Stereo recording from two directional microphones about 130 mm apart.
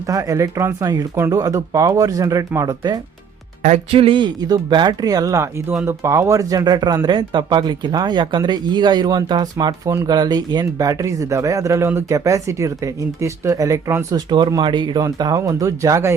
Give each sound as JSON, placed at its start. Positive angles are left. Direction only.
{"t": 0.1, "sound": "speech", "side_deg": -25}
{"t": 3.9, "sound": "speech", "side_deg": -45}